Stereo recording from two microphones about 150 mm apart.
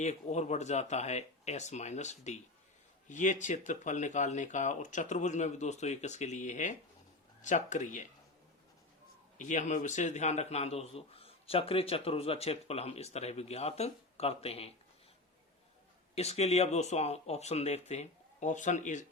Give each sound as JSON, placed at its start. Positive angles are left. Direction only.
{"t": 0.0, "sound": "a man's voice", "side_deg": 50}
{"t": 9.4, "sound": "a man's voice", "side_deg": 55}
{"t": 16.1, "sound": "a man's voice", "side_deg": 45}